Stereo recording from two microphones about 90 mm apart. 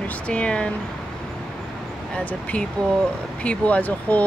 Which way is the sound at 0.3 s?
15° left (ahead or behind).